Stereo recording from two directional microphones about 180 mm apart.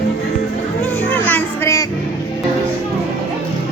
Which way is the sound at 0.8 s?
10° left (ahead or behind).